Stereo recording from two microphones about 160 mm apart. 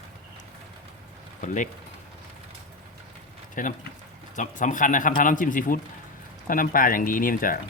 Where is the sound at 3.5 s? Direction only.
55° left (ahead or behind).